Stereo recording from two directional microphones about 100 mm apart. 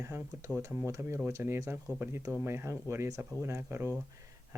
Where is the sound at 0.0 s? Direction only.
30° right (ahead or behind).